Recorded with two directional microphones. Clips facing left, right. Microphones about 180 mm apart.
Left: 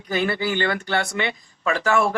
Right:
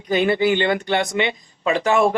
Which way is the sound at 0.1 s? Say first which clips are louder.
Right 6 dB; 20° right (ahead or behind).